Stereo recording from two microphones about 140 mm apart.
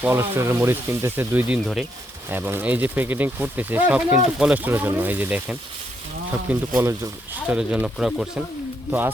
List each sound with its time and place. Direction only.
0.0 s speech: 15° right (ahead or behind)
7.5 s speech: 5° right (ahead or behind)
8.9 s speech: 15° right (ahead or behind)